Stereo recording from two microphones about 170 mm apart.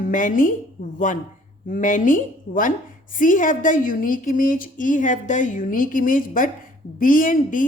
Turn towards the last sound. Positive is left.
turn(degrees=50)  # may be behind; listen again after turning